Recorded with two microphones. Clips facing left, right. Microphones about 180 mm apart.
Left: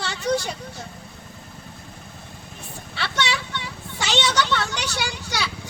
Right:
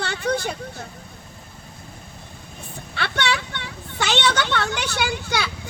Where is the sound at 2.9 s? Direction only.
55° right (ahead or behind).